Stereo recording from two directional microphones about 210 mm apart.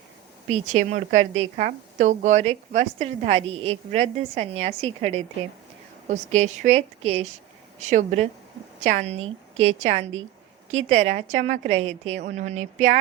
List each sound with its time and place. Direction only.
0.5 s a woman's voice: 35° right (ahead or behind)